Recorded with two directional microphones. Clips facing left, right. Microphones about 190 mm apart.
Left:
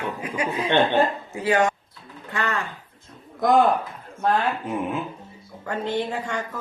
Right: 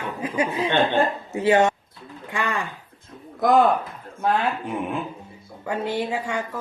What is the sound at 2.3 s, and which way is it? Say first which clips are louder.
Speech: even; 15° right (ahead or behind).